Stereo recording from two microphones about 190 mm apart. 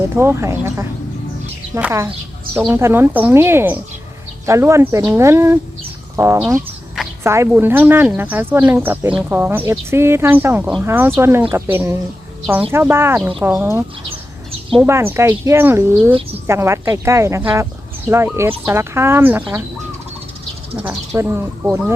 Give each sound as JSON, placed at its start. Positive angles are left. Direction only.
{"t": 0.2, "sound": "speech", "side_deg": -15}
{"t": 21.2, "sound": "speech", "side_deg": -10}